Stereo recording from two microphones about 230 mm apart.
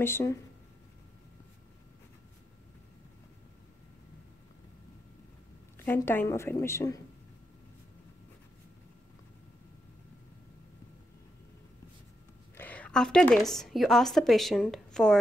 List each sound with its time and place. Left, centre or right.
0.0 s a woman's voice: centre
5.9 s a woman's voice: centre
12.5 s a woman's voice: centre